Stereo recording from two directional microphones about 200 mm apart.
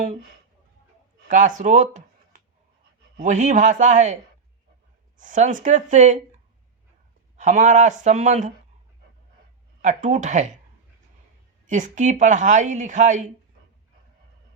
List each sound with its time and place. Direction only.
1.3 s speech: 40° right (ahead or behind)
3.2 s speech: 40° right (ahead or behind)
7.3 s speech: 40° right (ahead or behind)
9.8 s speech: 35° right (ahead or behind)
11.7 s speech: 40° right (ahead or behind)